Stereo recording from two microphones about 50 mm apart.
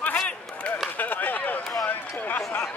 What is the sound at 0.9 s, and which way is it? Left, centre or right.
Chop, left.